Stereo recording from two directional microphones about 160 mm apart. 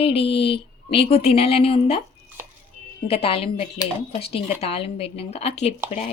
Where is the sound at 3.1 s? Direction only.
35° left (ahead or behind).